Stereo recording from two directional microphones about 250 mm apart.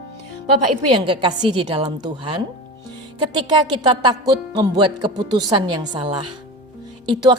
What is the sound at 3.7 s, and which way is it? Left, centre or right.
A woman's voice, centre.